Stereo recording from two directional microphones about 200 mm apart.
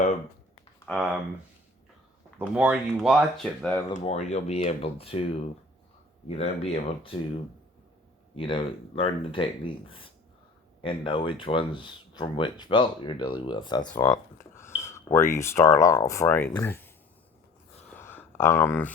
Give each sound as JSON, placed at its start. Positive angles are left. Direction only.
{"t": 0.9, "sound": "speech", "side_deg": 0}
{"t": 2.4, "sound": "speech", "side_deg": -5}
{"t": 4.0, "sound": "speech", "side_deg": 30}
{"t": 8.4, "sound": "speech", "side_deg": 25}
{"t": 14.3, "sound": "a sound", "side_deg": 15}
{"t": 14.8, "sound": "speech", "side_deg": 15}
{"t": 17.8, "sound": "a sound", "side_deg": 10}